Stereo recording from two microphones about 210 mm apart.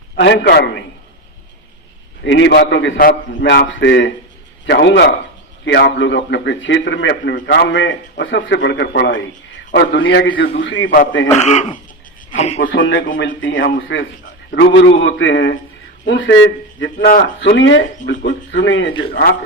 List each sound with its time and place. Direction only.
0.2 s a man's voice: 55° left (ahead or behind)
2.2 s a man's voice: 60° left (ahead or behind)
11.3 s speech: 35° left (ahead or behind)
12.7 s a man's voice: 65° left (ahead or behind)
17.1 s a man's voice: 45° left (ahead or behind)
17.6 s a man's voice: 60° left (ahead or behind)